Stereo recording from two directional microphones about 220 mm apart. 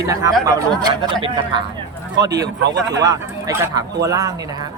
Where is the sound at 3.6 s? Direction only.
15° right (ahead or behind).